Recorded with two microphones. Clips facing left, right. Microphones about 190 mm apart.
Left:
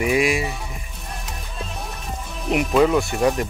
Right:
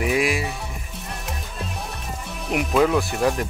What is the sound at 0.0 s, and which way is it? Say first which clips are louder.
Music: left 2 dB; centre (ahead or behind).